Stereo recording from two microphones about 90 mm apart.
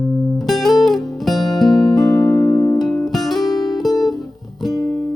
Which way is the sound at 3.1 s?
Centre (ahead or behind).